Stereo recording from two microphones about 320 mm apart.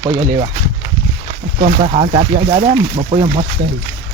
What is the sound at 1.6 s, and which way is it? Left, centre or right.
Speech, right.